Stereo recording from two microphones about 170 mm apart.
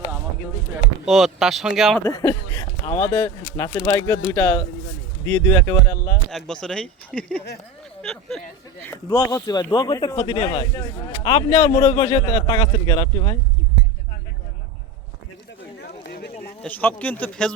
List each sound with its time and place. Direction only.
1.0 s speech: centre (ahead or behind)
2.0 s a man's voice: 20° left (ahead or behind)
4.3 s speech: 15° left (ahead or behind)
6.3 s speech: 5° left (ahead or behind)
8.9 s a man's voice: 20° left (ahead or behind)
15.8 s a sound: 70° left (ahead or behind)
16.4 s speech: 10° left (ahead or behind)